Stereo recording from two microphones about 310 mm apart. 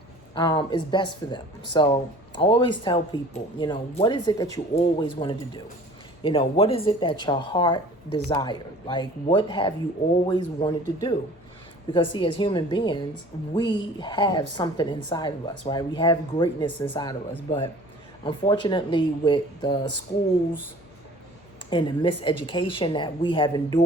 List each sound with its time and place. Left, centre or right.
0.3 s a woman's voice: centre
21.7 s a woman's voice: centre